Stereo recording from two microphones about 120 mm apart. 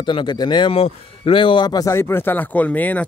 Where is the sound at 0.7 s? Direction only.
50° left (ahead or behind); by 3.0 s 15° left (ahead or behind).